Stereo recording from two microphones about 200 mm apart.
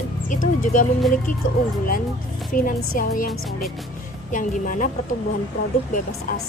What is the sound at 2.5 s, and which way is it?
Speech, 45° left (ahead or behind).